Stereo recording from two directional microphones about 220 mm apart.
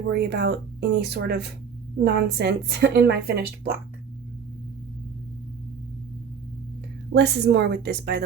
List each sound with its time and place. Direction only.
0.1 s a woman's voice: 50° right (ahead or behind)
7.1 s a woman's voice: 50° right (ahead or behind)